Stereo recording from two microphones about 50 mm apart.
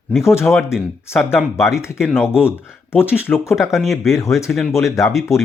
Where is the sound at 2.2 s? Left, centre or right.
Left.